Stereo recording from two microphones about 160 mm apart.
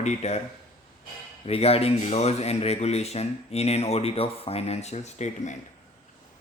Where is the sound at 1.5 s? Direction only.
40° left (ahead or behind).